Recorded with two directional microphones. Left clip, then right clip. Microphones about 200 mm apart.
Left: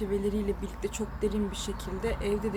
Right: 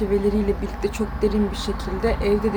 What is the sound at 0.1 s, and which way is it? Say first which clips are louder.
Speech: right 9 dB; centre (ahead or behind).